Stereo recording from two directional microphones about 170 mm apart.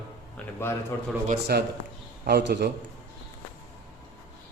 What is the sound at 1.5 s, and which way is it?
A man's voice, 70° right (ahead or behind).